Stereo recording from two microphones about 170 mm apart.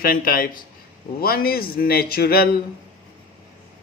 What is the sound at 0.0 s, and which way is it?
A man's voice, 60° left (ahead or behind).